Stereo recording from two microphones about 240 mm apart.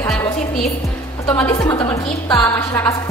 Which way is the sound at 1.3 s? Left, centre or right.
Centre.